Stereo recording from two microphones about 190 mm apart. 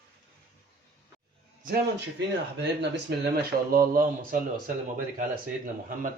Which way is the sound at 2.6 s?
60° right (ahead or behind).